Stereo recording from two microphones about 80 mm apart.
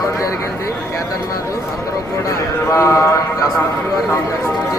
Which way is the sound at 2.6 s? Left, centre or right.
Left.